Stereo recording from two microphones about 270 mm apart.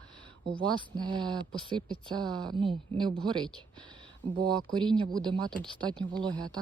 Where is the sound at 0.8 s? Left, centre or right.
Centre.